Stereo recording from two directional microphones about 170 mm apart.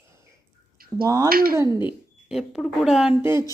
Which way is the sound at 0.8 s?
60° right (ahead or behind).